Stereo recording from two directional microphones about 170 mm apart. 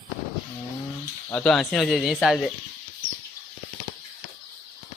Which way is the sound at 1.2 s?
10° left (ahead or behind).